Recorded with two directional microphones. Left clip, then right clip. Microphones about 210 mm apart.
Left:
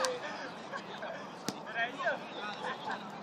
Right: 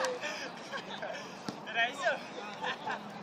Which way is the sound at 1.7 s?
45° right (ahead or behind).